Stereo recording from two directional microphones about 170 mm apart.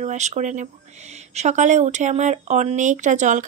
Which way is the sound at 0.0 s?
40° right (ahead or behind).